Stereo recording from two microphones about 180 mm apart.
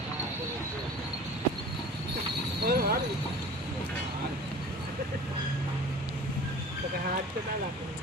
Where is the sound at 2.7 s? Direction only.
55° right (ahead or behind).